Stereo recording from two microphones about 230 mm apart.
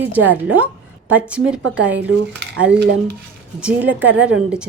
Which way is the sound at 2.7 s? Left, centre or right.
Right.